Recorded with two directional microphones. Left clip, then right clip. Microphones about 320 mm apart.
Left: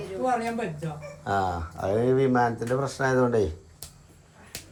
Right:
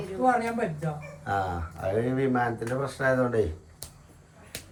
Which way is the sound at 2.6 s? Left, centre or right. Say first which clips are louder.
Left 2 dB; centre.